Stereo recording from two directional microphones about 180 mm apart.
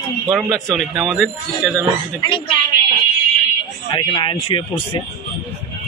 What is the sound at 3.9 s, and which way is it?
Speech, 25° left (ahead or behind).